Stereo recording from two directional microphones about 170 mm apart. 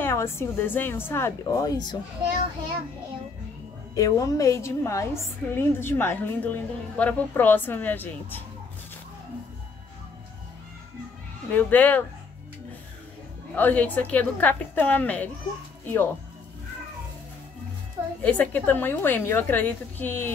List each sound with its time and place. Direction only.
0.0 s a woman's voice: 15° left (ahead or behind)
3.9 s a woman's voice: 20° left (ahead or behind)
11.5 s a woman's voice: 10° left (ahead or behind)
13.6 s a woman's voice: 10° left (ahead or behind)
18.2 s a woman's voice: 10° left (ahead or behind)